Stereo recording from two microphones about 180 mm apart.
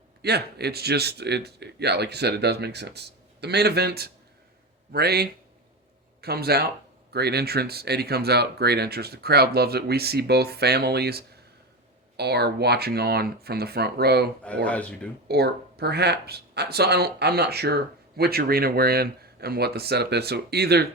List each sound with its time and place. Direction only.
0.2 s speech: 65° right (ahead or behind)
14.4 s speech: 5° left (ahead or behind)
15.3 s speech: 60° right (ahead or behind)